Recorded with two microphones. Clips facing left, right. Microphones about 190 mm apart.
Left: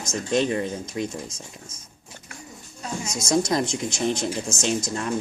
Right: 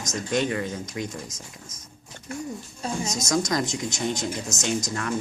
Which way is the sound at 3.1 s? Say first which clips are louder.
Left 4 dB; 30° left (ahead or behind).